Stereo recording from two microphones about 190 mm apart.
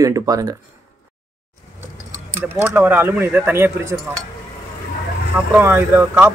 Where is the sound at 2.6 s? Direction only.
10° right (ahead or behind).